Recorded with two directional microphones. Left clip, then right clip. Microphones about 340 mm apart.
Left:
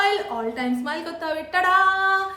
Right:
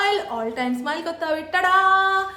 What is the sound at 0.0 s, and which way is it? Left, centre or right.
A woman's voice, centre.